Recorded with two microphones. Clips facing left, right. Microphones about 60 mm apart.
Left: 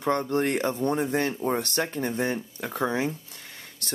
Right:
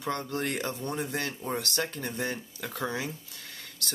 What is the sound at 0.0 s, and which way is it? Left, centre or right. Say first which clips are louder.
Speech: left 7 dB; left.